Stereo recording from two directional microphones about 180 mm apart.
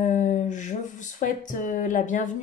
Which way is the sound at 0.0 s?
45° left (ahead or behind).